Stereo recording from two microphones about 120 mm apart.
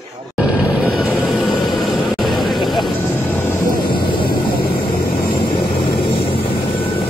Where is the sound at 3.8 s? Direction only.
45° left (ahead or behind).